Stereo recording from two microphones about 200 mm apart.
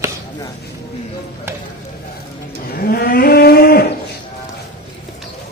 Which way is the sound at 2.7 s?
50° left (ahead or behind).